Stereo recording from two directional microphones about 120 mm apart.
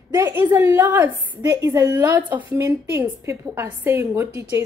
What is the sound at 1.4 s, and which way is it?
Speech, 30° right (ahead or behind).